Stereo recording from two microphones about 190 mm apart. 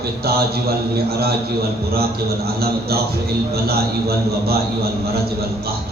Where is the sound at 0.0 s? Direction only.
55° right (ahead or behind).